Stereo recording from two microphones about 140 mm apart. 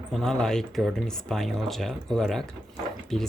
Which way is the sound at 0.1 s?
5° left (ahead or behind).